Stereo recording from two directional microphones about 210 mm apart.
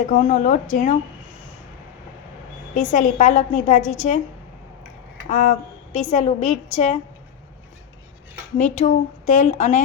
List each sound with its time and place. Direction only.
0.1 s a woman's voice: 35° left (ahead or behind)
2.7 s a woman's voice: 35° left (ahead or behind)
5.3 s a woman's voice: 35° left (ahead or behind)
8.6 s a woman's voice: 35° left (ahead or behind)